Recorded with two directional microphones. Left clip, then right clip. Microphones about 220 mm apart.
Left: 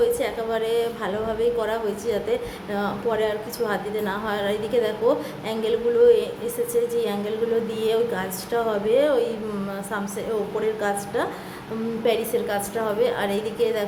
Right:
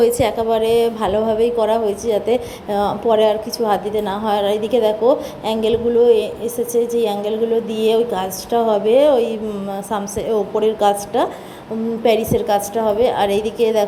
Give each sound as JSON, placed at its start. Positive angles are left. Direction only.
{"t": 0.2, "sound": "a woman's voice", "side_deg": -25}
{"t": 10.8, "sound": "a woman's voice", "side_deg": -20}